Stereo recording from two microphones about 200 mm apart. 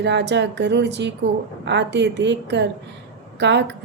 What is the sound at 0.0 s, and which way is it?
Music, 60° right (ahead or behind).